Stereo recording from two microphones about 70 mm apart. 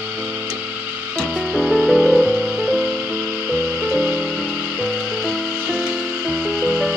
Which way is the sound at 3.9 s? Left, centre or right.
Centre.